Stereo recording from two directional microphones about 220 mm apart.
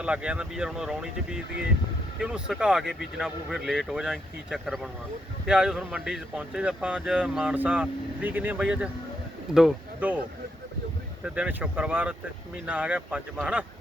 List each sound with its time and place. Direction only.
0.0 s speech: 5° right (ahead or behind)
11.2 s speech: 5° right (ahead or behind)